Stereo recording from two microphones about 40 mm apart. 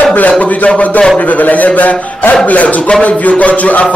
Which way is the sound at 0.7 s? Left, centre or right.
Left.